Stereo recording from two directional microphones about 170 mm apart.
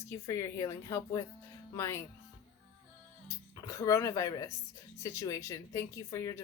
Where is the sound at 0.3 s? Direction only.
20° left (ahead or behind).